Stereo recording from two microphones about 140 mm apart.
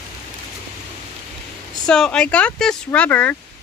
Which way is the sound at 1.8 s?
5° left (ahead or behind).